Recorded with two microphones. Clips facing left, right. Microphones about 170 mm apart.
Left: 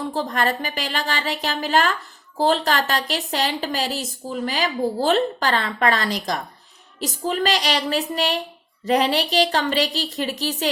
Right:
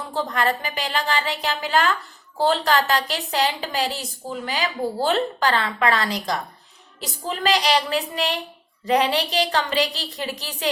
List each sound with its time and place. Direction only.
0.1 s a woman's voice: 35° left (ahead or behind)